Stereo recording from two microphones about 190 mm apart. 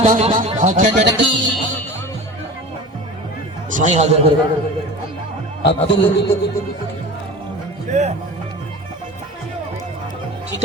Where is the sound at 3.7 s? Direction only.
40° right (ahead or behind).